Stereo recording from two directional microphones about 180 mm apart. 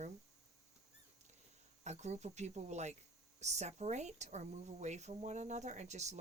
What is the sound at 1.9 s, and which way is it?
Speech, 40° right (ahead or behind).